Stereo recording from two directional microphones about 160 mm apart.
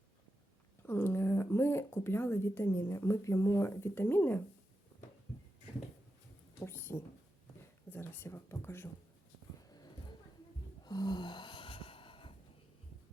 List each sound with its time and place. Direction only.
0.9 s speech: 15° left (ahead or behind)
6.6 s a woman's voice: 15° left (ahead or behind)
9.6 s a sound: 25° left (ahead or behind)